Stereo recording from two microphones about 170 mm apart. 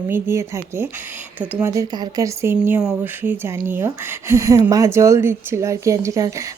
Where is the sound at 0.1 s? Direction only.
15° right (ahead or behind).